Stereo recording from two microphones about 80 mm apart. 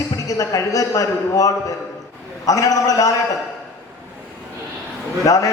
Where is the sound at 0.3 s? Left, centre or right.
Left.